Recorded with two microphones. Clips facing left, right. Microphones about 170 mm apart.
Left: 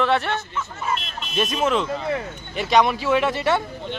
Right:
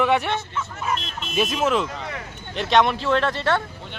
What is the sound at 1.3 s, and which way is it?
A man's voice, 5° right (ahead or behind).